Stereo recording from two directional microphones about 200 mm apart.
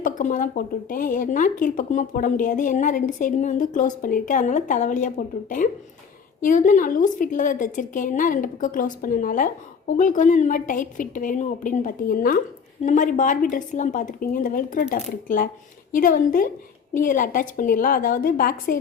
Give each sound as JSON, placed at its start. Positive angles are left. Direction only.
{"t": 0.0, "sound": "a woman's voice", "side_deg": 40}